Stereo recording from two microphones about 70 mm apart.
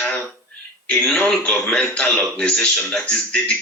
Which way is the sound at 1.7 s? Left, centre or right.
Centre.